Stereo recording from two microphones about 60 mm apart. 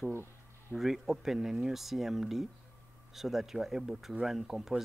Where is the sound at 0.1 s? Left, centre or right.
Right.